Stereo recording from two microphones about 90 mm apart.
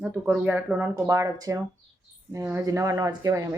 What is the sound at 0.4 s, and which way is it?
Speech, 15° right (ahead or behind).